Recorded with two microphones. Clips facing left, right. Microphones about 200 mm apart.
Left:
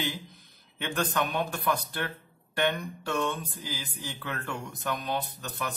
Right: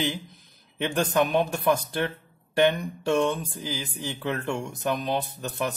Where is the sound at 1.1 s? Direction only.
25° right (ahead or behind).